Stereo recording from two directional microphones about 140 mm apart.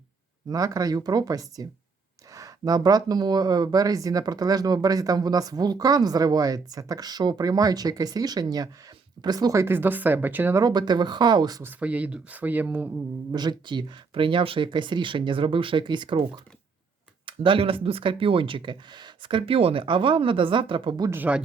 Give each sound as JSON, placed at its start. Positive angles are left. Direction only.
{"t": 0.5, "sound": "speech", "side_deg": -25}
{"t": 10.6, "sound": "speech", "side_deg": -30}
{"t": 11.6, "sound": "speech", "side_deg": -10}
{"t": 13.3, "sound": "speech", "side_deg": -30}
{"t": 21.1, "sound": "speech", "side_deg": -10}